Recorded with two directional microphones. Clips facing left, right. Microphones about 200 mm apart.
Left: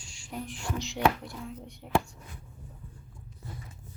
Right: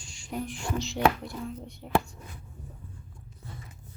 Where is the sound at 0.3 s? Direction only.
Centre (ahead or behind).